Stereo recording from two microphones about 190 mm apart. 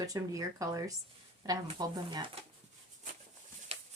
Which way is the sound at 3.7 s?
30° right (ahead or behind).